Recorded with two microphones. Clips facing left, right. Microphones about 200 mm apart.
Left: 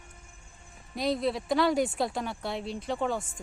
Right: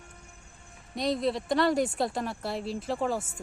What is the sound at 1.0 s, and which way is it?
Speech, centre (ahead or behind).